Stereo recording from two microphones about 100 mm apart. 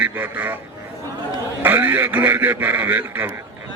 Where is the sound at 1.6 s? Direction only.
20° right (ahead or behind).